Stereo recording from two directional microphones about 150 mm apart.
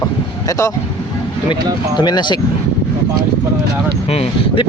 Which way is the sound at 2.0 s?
30° left (ahead or behind).